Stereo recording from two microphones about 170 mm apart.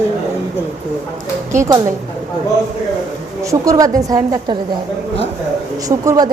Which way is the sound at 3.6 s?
20° right (ahead or behind).